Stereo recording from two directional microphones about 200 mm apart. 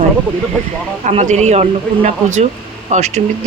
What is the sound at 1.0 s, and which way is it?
Speech, 35° right (ahead or behind).